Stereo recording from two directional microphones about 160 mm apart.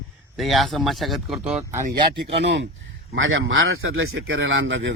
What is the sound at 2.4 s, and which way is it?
Speech, 90° right.